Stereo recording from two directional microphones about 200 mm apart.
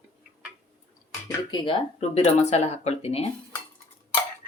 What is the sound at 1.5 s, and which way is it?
Speech, 25° left (ahead or behind).